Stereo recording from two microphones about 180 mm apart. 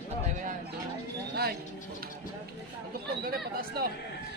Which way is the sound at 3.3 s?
55° right (ahead or behind).